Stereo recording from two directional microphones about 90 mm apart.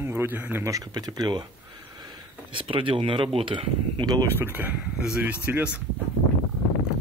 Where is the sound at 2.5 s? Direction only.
75° right (ahead or behind).